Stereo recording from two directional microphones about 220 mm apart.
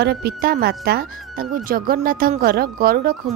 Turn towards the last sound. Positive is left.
turn(degrees=-40)  # may be behind; listen again after turning